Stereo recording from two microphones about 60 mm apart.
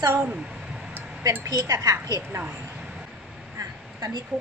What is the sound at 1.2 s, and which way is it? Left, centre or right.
Speech, right.